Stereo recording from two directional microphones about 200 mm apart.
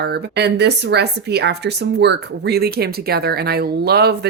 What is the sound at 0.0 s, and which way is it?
Speech, 55° right (ahead or behind).